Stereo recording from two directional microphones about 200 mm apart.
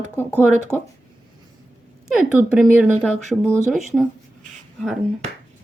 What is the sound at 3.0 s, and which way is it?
A woman's voice, 5° left (ahead or behind).